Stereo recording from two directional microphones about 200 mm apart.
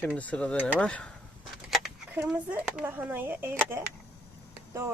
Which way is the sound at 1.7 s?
5° right (ahead or behind).